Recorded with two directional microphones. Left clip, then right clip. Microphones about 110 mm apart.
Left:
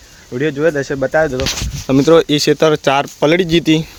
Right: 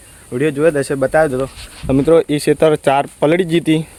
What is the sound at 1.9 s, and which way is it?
Speech, 25° left (ahead or behind).